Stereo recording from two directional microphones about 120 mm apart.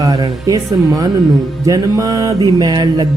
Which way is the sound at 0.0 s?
30° right (ahead or behind).